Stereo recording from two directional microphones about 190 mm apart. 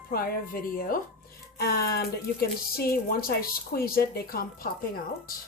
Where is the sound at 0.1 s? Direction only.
50° left (ahead or behind).